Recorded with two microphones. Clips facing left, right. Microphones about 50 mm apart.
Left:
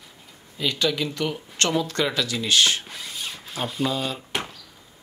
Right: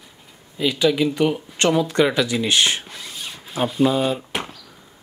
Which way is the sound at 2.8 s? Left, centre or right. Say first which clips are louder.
Even; centre.